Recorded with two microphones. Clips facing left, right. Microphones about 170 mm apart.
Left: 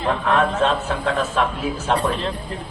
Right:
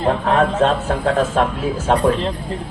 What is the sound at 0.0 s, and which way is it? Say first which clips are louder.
A man's voice: right 3 dB; 45° right (ahead or behind).